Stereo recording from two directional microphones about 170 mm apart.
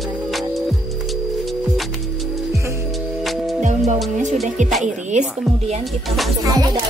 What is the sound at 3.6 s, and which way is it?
Music, 45° right (ahead or behind).